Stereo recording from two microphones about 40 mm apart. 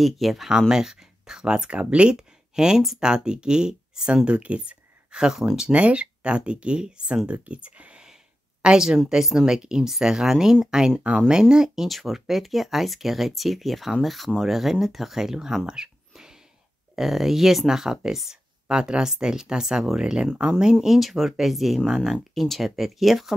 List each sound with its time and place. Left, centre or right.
0.0 s speech: centre
0.5 s speech: centre; by 2.1 s right
2.1 s a sound: centre
3.0 s speech: centre
5.1 s speech: centre
5.7 s speech: right
7.4 s speech: right
8.6 s speech: centre
9.5 s speech: centre
11.1 s speech: right
16.9 s speech: centre
20.8 s speech: centre
22.3 s speech: centre